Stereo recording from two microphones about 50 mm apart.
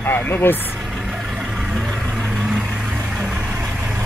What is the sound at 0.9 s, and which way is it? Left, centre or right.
Vehicle, centre.